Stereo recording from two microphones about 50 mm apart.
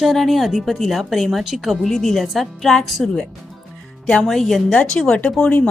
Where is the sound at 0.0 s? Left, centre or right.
Centre.